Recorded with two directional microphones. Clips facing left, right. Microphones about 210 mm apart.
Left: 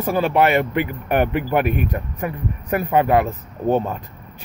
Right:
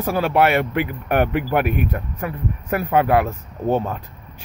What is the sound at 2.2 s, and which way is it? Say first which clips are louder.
Speech: left 1 dB; 5° left (ahead or behind).